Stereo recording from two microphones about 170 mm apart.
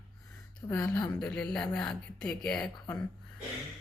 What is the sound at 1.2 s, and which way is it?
Speech, 5° left (ahead or behind).